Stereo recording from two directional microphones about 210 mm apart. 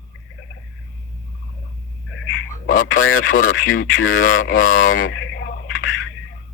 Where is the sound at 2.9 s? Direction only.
70° left (ahead or behind).